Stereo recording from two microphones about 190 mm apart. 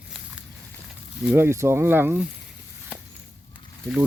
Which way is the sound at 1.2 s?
10° right (ahead or behind).